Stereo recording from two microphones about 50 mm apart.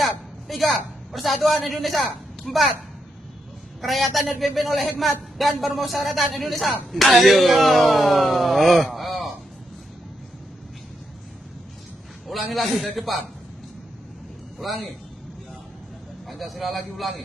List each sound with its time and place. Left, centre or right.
0.0 s a sound: centre
1.8 s speech: centre
3.8 s speech: centre
12.5 s speech: centre
14.6 s speech: centre
16.3 s speech: centre